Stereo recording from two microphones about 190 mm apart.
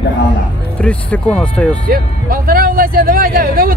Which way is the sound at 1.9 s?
50° right (ahead or behind).